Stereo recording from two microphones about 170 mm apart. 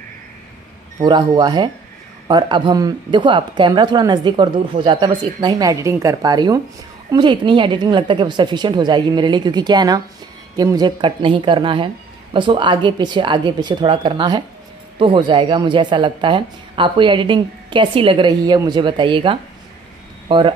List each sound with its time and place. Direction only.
1.3 s speech: 25° right (ahead or behind)